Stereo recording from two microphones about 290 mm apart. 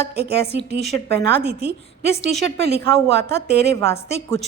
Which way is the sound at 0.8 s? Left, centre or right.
Centre.